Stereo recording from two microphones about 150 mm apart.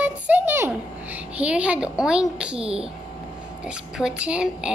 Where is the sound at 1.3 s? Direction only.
10° right (ahead or behind).